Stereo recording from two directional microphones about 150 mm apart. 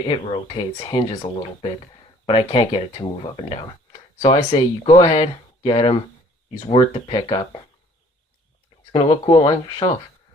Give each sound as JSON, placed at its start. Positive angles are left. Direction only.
{"t": 0.1, "sound": "speech", "side_deg": 35}
{"t": 8.9, "sound": "speech", "side_deg": 40}